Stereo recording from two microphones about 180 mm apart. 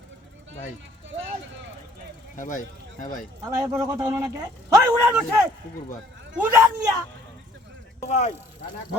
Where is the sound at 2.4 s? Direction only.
45° left (ahead or behind).